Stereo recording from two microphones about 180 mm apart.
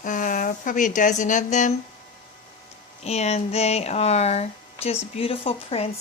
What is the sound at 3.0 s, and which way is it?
Speech, 35° left (ahead or behind).